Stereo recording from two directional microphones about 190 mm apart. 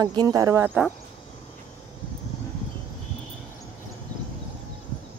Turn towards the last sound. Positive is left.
turn(degrees=10)  # may be behind; listen again after turning